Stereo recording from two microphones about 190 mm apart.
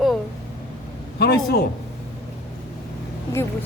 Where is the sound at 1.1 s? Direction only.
55° left (ahead or behind).